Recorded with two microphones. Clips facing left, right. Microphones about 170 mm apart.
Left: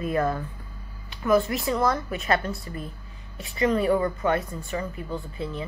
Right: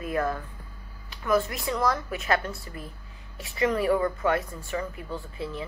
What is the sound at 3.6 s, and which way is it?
A woman's voice, 20° left (ahead or behind).